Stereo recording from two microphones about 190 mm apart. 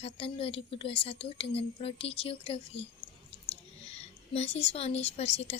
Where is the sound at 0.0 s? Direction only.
30° left (ahead or behind).